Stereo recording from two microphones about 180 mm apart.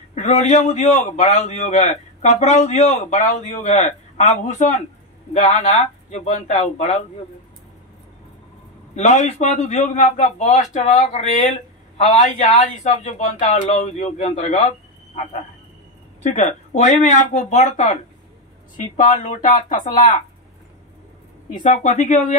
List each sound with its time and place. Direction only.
0.1 s a man's voice: 40° left (ahead or behind)
8.9 s a man's voice: 40° left (ahead or behind)
16.2 s a man's voice: 40° left (ahead or behind)
21.5 s a man's voice: 45° left (ahead or behind)